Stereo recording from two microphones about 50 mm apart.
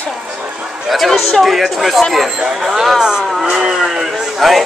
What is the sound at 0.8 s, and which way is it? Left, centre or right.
Speech, centre.